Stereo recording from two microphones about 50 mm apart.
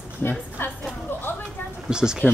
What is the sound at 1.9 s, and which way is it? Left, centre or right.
Speech, centre.